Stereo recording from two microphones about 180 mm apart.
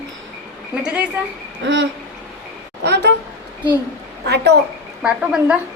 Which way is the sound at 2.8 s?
70° right (ahead or behind).